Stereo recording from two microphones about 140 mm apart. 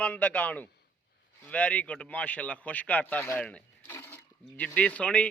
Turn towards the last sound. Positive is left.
turn(degrees=10)  # may be behind; listen again after turning